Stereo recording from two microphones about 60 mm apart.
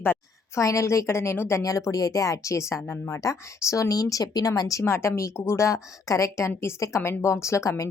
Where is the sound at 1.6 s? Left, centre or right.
Left.